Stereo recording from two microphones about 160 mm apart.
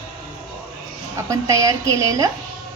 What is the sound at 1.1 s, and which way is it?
A woman's voice, 20° right (ahead or behind).